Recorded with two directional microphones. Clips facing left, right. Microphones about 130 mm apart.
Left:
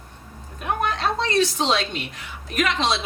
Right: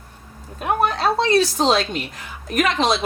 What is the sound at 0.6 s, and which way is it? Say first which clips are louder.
A woman's voice: right 4 dB; 35° right (ahead or behind).